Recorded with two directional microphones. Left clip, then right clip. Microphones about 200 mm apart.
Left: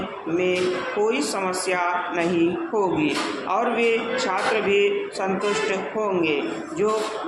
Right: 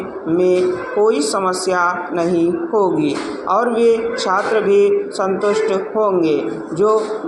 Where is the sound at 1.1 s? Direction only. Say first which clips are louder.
Right 7 dB; 25° right (ahead or behind).